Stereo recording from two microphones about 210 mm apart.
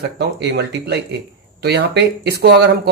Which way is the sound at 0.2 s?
55° right (ahead or behind).